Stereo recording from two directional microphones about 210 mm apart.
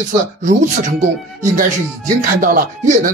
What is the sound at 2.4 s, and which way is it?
Speech, 40° right (ahead or behind).